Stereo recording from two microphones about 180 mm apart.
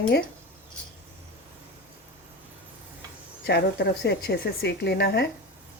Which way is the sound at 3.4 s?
65° left (ahead or behind).